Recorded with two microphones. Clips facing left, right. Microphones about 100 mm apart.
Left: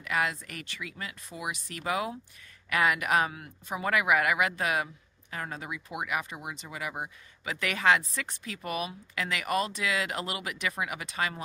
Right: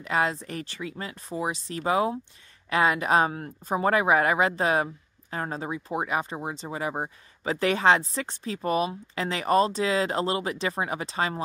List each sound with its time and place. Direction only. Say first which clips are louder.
0.0 s speech: right 4 dB; 30° right (ahead or behind)